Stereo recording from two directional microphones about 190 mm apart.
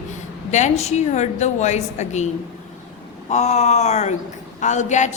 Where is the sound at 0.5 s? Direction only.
35° left (ahead or behind).